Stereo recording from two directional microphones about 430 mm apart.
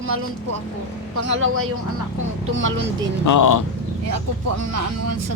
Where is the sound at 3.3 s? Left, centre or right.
Left.